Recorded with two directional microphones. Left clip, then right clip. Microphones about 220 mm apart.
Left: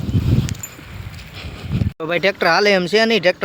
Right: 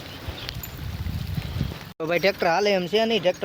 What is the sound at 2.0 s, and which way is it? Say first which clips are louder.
Speech: left 5 dB; 10° left (ahead or behind).